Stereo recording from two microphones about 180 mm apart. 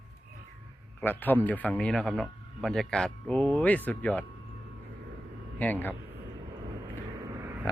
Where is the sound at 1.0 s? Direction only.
10° left (ahead or behind).